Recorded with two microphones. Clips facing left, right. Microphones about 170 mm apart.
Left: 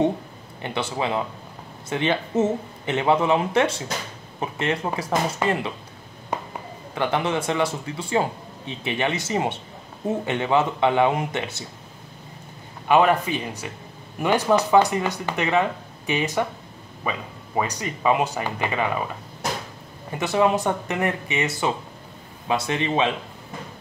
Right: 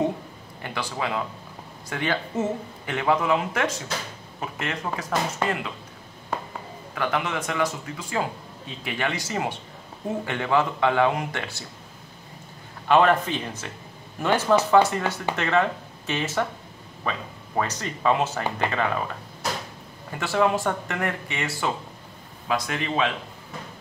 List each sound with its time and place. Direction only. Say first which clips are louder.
0.6 s speech: left 4 dB; 20° left (ahead or behind)
6.3 s a sound: left 2 dB; 15° left (ahead or behind)
7.0 s speech: left 3 dB; 30° left (ahead or behind)
12.8 s speech: left 1 dB; 10° left (ahead or behind)
20.1 s speech: left 2 dB; 20° left (ahead or behind)